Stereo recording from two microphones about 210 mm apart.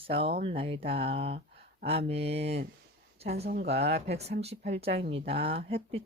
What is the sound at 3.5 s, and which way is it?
Speech, 50° right (ahead or behind).